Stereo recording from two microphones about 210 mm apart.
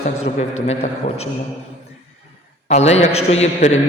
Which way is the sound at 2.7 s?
30° left (ahead or behind).